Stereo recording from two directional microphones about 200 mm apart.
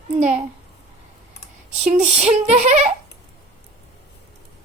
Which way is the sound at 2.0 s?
30° right (ahead or behind).